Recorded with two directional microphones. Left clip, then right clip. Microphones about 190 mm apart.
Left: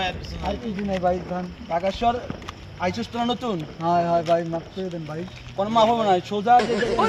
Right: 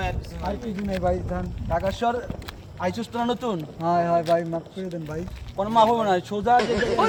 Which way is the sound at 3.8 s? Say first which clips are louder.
Left 1 dB; 15° right (ahead or behind).